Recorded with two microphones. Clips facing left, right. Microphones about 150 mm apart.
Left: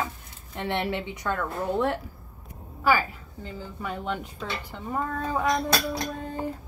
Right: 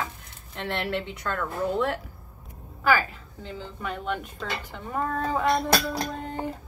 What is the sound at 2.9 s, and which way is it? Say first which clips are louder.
A woman's voice: right 4 dB; 10° left (ahead or behind).